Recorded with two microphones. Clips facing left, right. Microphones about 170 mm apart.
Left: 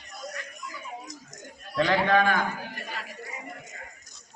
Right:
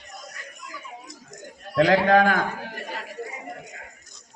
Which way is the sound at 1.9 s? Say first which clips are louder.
Right 3 dB; 45° right (ahead or behind).